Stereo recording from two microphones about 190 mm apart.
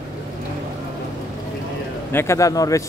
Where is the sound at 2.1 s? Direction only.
15° left (ahead or behind).